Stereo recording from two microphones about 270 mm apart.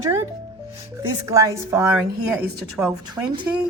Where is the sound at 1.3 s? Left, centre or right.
Centre.